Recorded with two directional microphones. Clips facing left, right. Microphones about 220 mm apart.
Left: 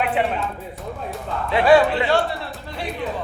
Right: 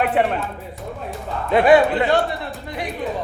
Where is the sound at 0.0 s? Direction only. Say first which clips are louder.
Right 3 dB; 45° right (ahead or behind).